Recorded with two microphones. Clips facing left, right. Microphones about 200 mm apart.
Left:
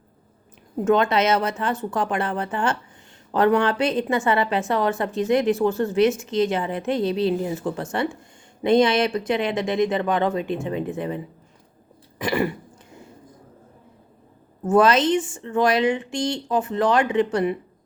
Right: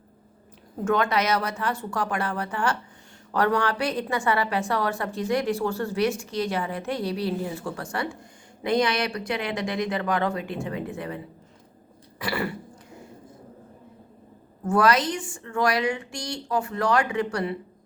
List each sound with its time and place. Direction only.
0.9 s speech: 25° left (ahead or behind)
12.2 s throat clearing: 20° left (ahead or behind)
14.6 s speech: 20° left (ahead or behind)